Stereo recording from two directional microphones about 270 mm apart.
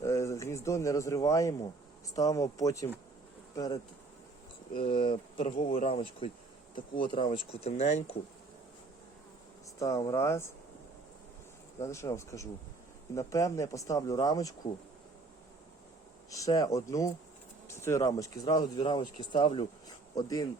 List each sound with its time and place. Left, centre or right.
0.0 s speech: centre
3.5 s bee: centre
4.7 s speech: centre
9.7 s speech: centre
11.8 s speech: centre
16.3 s speech: centre